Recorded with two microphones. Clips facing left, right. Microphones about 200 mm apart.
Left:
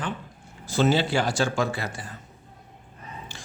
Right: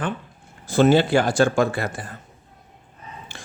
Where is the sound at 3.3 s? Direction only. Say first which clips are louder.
Right 2 dB; 55° right (ahead or behind).